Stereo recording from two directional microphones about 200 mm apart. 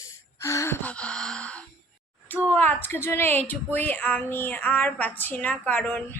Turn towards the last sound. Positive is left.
turn(degrees=10)  # may be behind; listen again after turning